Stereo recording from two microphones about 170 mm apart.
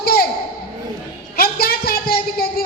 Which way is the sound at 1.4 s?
65° left (ahead or behind).